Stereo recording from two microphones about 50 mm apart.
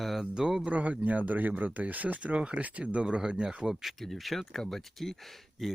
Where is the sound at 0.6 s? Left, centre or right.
Right; by 3.9 s centre.